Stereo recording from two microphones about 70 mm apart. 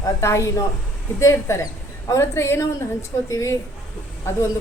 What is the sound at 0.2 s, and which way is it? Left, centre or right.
A woman's voice, left.